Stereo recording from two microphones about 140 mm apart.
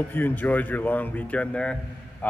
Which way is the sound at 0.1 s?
15° left (ahead or behind).